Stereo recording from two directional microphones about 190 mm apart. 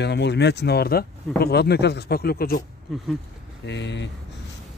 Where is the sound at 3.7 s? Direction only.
65° left (ahead or behind).